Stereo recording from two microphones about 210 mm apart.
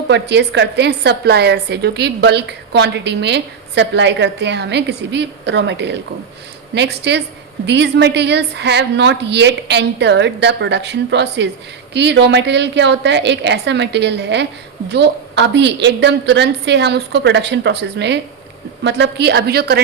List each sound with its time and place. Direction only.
0.1 s a woman's voice: 55° right (ahead or behind)